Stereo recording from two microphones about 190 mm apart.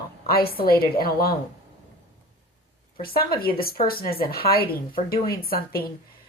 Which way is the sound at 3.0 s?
50° left (ahead or behind).